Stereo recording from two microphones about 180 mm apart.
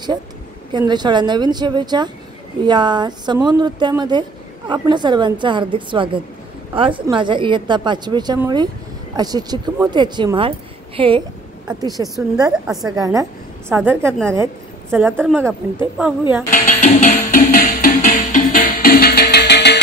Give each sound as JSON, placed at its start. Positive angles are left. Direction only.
{"t": 0.7, "sound": "a woman's voice", "side_deg": -25}
{"t": 16.4, "sound": "music", "side_deg": 45}